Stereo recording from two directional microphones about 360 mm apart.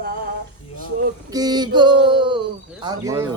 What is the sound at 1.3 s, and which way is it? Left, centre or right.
Speech, centre.